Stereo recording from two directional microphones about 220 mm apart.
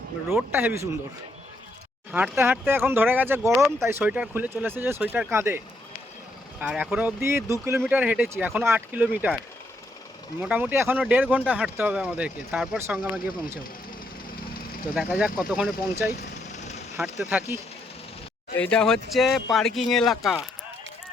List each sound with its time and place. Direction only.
0.3 s speech: 10° right (ahead or behind)
2.1 s speech: 10° right (ahead or behind)
10.4 s speech: 5° right (ahead or behind)
14.9 s speech: 5° right (ahead or behind)
16.5 s vehicle: 30° left (ahead or behind)
17.0 s speech: 5° right (ahead or behind)
18.6 s speech: 5° left (ahead or behind)